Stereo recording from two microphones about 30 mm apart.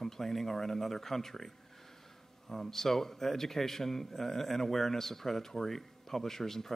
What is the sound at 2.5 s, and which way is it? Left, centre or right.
A man's voice, centre.